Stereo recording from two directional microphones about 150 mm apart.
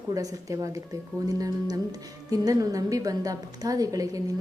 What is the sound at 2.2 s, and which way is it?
A woman's voice, 25° right (ahead or behind).